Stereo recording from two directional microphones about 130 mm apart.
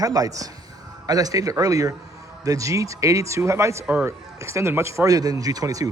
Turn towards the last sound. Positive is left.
turn(degrees=-30)  # may be behind; listen again after turning